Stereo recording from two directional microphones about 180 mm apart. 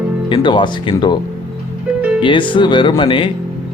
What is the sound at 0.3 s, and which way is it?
Speech, 25° left (ahead or behind).